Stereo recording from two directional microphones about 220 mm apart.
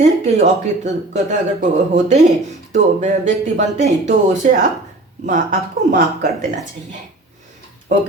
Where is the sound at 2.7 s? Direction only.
35° right (ahead or behind).